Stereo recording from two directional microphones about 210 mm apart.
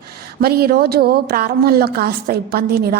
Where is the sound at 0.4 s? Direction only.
45° right (ahead or behind).